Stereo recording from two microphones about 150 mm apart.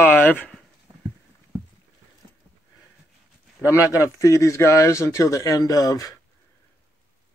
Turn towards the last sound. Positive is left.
turn(degrees=25)  # may be behind; listen again after turning